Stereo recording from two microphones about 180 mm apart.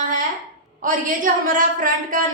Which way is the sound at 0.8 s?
45° right (ahead or behind).